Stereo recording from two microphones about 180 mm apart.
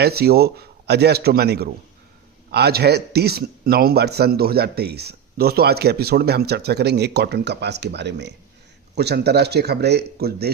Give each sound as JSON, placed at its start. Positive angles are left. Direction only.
{"t": 0.0, "sound": "a man's voice", "side_deg": -60}